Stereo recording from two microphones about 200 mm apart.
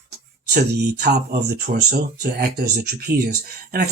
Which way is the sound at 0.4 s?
50° right (ahead or behind).